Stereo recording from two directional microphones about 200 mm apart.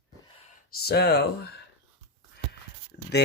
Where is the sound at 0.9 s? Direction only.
55° left (ahead or behind).